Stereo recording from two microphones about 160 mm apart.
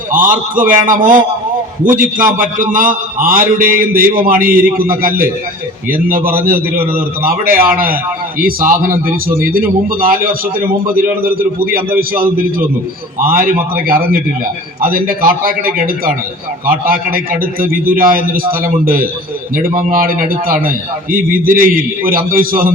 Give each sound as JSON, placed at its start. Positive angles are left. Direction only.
{"t": 0.1, "sound": "a man's voice", "side_deg": -55}
{"t": 13.2, "sound": "a man's voice", "side_deg": -65}